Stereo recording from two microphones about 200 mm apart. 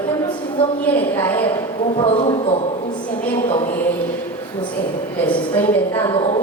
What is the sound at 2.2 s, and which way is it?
Speech, 25° left (ahead or behind).